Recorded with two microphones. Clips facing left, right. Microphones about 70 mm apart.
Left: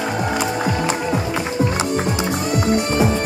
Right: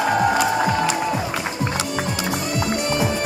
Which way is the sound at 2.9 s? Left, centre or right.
Left.